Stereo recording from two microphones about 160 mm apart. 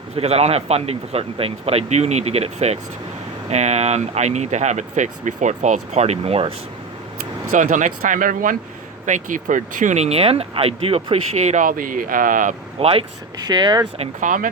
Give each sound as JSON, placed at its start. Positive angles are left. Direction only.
{"t": 0.2, "sound": "speech", "side_deg": -40}
{"t": 7.5, "sound": "speech", "side_deg": -55}
{"t": 12.8, "sound": "speech", "side_deg": -35}
{"t": 14.0, "sound": "speech", "side_deg": -55}